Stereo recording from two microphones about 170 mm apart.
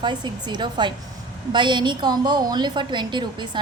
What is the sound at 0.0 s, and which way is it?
A woman's voice, 25° right (ahead or behind).